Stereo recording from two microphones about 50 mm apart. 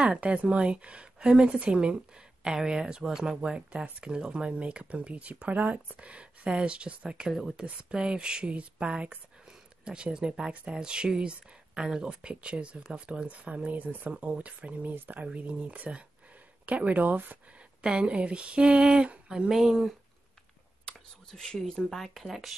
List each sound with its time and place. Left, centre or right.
0.0 s speech: right
10.1 s speech: centre; by 15.2 s right
15.3 s speech: right
17.8 s speech: right
19.5 s speech: centre
20.8 s speech: centre
21.9 s speech: centre